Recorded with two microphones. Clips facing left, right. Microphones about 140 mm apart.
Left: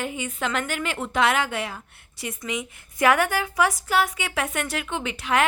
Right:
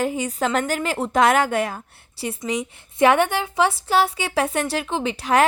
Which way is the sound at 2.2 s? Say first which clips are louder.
Right 5 dB; 35° right (ahead or behind).